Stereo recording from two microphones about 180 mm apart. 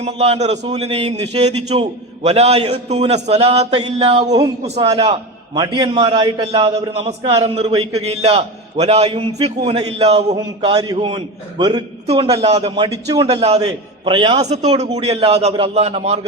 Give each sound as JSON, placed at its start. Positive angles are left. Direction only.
{"t": 0.0, "sound": "a man's voice", "side_deg": -35}
{"t": 10.6, "sound": "a man's voice", "side_deg": -25}
{"t": 14.4, "sound": "a man's voice", "side_deg": -40}